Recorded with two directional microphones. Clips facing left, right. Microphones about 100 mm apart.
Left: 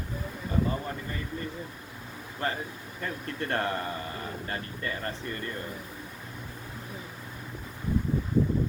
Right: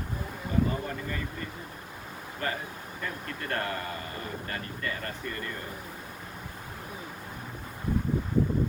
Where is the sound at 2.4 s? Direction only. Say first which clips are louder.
Left 2 dB; 25° left (ahead or behind).